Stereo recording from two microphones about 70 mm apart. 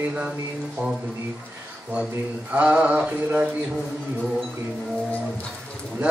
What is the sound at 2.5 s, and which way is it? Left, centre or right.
Mantra, centre.